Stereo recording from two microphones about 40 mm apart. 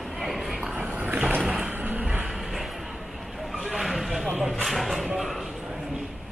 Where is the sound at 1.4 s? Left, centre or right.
Centre.